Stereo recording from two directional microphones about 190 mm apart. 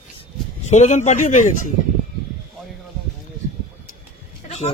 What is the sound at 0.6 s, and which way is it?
Speech, 40° left (ahead or behind).